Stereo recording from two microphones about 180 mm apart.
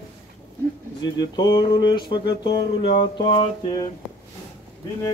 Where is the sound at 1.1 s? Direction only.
20° left (ahead or behind).